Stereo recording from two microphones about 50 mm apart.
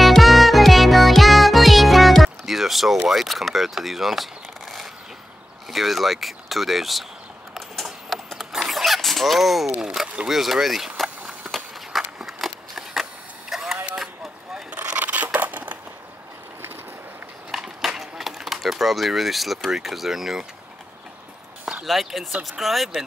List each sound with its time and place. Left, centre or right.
0.0 s music: centre
3.1 s speech: centre
7.5 s a sound: centre
10.2 s speech: centre
12.2 s a sound: centre
13.5 s printer: centre
13.9 s vehicle: centre
14.7 s scissors: right
17.5 s a sound: centre
19.7 s speech: centre
21.8 s speech: centre